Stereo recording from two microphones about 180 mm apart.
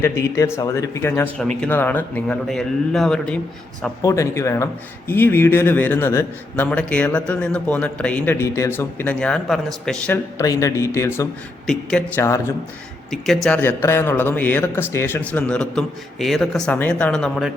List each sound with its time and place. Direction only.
0.0 s a man's voice: 15° left (ahead or behind)
4.0 s a man's voice: 15° left (ahead or behind)
10.3 s a man's voice: 20° left (ahead or behind)
11.6 s a man's voice: 5° left (ahead or behind)